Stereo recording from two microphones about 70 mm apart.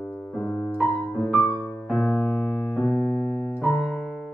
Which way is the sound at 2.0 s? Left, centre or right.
Left.